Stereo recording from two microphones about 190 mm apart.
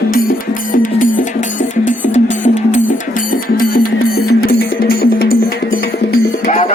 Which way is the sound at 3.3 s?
50° left (ahead or behind).